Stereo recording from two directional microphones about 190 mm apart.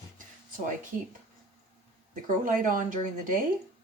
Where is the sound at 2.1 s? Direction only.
40° right (ahead or behind).